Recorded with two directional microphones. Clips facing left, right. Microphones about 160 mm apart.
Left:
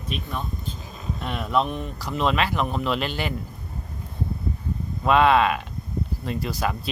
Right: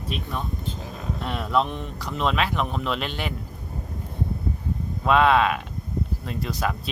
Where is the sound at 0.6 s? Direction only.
65° right (ahead or behind).